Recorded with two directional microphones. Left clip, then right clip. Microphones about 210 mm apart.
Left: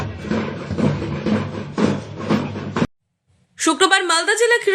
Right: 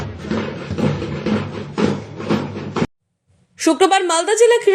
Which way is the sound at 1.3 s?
15° right (ahead or behind).